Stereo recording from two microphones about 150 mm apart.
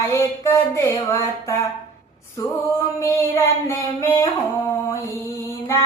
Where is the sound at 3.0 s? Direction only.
20° left (ahead or behind).